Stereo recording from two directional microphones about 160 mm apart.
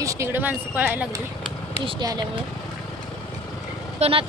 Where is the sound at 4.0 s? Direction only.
35° right (ahead or behind).